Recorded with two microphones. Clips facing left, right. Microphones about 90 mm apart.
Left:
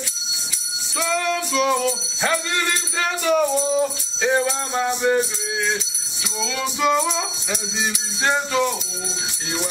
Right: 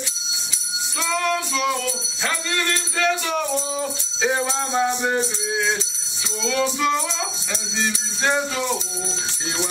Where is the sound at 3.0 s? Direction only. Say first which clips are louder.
Left 3 dB; 5° left (ahead or behind).